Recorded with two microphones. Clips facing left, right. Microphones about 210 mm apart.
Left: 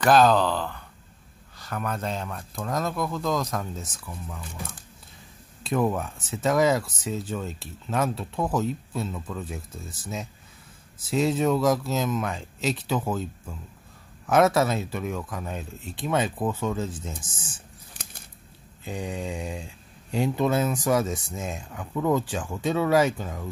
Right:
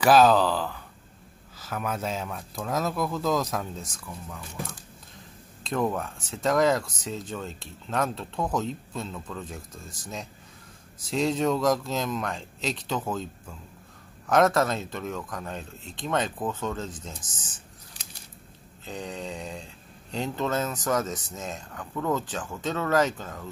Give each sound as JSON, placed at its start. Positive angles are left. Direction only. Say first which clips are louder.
{"t": 0.0, "sound": "speech", "louder": "even", "side_deg": -5}
{"t": 18.9, "sound": "speech", "louder": "left 3 dB", "side_deg": 10}